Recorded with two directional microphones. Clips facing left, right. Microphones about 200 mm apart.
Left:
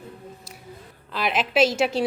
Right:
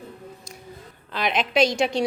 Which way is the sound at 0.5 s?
5° left (ahead or behind).